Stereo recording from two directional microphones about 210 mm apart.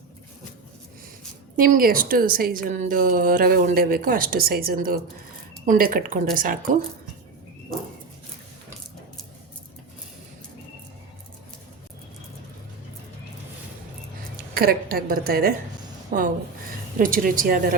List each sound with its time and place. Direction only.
1.5 s a woman's voice: 45° right (ahead or behind)
14.5 s a woman's voice: 45° right (ahead or behind)